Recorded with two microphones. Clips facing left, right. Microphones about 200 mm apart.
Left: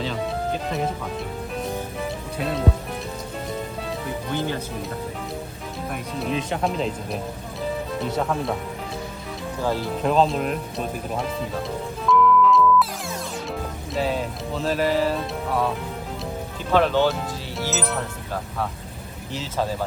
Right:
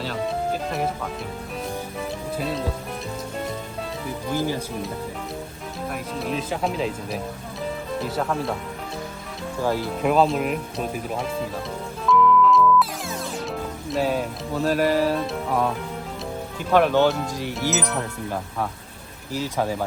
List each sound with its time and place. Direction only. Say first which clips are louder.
0.0 s music: even; 5° right (ahead or behind)
2.4 s speech: left 3 dB; centre (ahead or behind)
4.0 s speech: right 2 dB; 5° right (ahead or behind)
5.9 s speech: left 1 dB; centre (ahead or behind)
9.6 s speech: right 1 dB; 10° right (ahead or behind)
12.0 s music: even; centre (ahead or behind)
14.0 s speech: right 1 dB; 10° right (ahead or behind)
16.7 s speech: right 1 dB; 10° right (ahead or behind)
17.4 s music: right 3 dB; 15° right (ahead or behind)
19.4 s speech: right 2 dB; 15° right (ahead or behind)